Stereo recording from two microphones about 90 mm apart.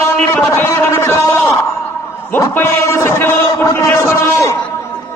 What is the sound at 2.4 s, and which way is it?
A man's voice, 30° left (ahead or behind).